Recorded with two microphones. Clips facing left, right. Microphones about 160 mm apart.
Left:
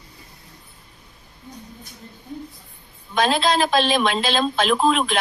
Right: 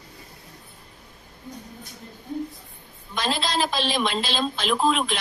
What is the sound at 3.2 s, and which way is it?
A woman's voice, 55° left (ahead or behind).